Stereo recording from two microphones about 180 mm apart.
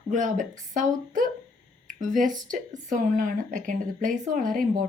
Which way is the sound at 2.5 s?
45° right (ahead or behind).